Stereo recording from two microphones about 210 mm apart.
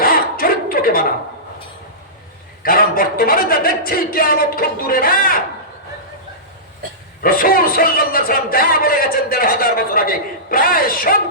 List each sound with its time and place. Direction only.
0.0 s a sound: 45° left (ahead or behind)
2.6 s a man's voice: 45° left (ahead or behind)
7.2 s a man's voice: 45° left (ahead or behind)